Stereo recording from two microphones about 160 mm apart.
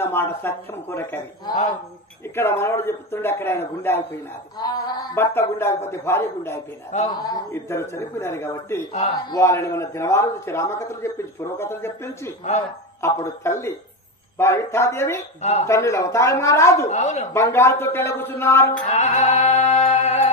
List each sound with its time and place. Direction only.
0.0 s a man's voice: 15° left (ahead or behind)
2.3 s a man's voice: 15° left (ahead or behind)
4.6 s a man's voice: 25° left (ahead or behind)
7.1 s a man's voice: 25° left (ahead or behind)
16.9 s speech: 45° left (ahead or behind)
17.3 s a man's voice: 15° left (ahead or behind)
18.9 s music: 45° left (ahead or behind)